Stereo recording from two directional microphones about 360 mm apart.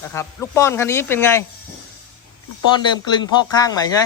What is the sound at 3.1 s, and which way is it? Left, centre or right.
Speech, centre.